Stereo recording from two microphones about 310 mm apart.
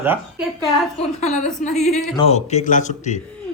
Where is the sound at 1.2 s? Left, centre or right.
Left.